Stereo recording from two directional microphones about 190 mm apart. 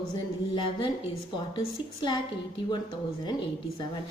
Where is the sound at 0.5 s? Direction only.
25° left (ahead or behind).